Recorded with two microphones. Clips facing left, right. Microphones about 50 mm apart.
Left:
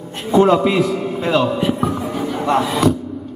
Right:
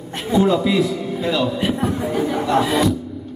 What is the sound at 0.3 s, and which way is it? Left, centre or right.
Speech, left.